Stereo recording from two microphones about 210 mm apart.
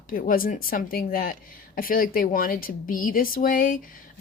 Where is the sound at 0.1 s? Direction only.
40° left (ahead or behind).